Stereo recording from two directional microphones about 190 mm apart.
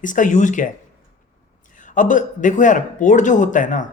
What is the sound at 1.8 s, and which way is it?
Speech, 40° left (ahead or behind).